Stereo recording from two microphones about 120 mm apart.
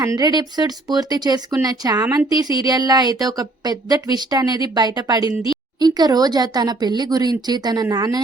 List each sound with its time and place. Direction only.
0.0 s a woman's voice: 30° right (ahead or behind)